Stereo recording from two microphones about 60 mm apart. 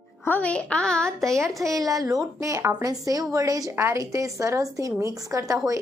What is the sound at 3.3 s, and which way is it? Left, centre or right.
A woman's voice, right.